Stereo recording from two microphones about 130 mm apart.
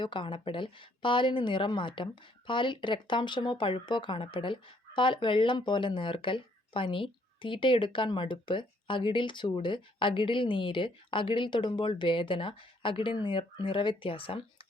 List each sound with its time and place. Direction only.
0.0 s speech: 40° left (ahead or behind)